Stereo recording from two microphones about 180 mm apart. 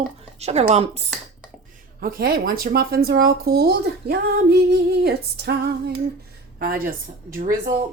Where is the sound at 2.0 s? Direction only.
55° right (ahead or behind).